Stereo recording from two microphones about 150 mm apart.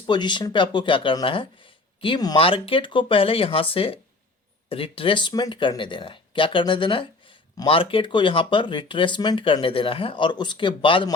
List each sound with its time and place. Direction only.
0.0 s speech: 30° left (ahead or behind)